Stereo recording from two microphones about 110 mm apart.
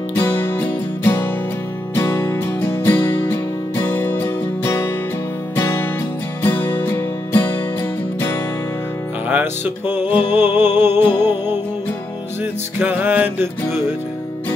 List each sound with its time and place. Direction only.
0.1 s music: 20° left (ahead or behind)
9.3 s music: 20° right (ahead or behind)
12.7 s music: 15° right (ahead or behind)